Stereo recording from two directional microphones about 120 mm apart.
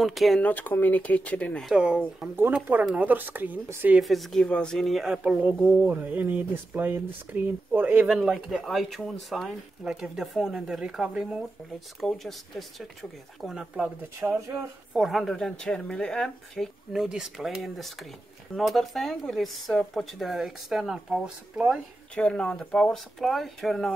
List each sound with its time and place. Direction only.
0.0 s speech: centre (ahead or behind)
0.4 s speech: 15° left (ahead or behind)
1.7 s speech: 5° right (ahead or behind)
4.0 s speech: centre (ahead or behind)
8.2 s speech: centre (ahead or behind)
14.2 s speech: 20° right (ahead or behind)
15.0 s speech: centre (ahead or behind)
22.1 s speech: 10° left (ahead or behind)